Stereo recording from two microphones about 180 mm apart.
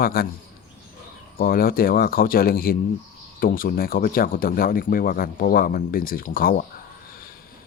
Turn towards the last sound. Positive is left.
turn(degrees=55)  # may be behind; listen again after turning